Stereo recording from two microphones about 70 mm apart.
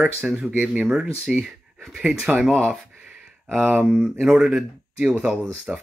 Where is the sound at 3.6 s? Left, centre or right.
Centre.